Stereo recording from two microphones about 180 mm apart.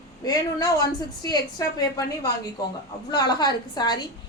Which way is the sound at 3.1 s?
25° left (ahead or behind).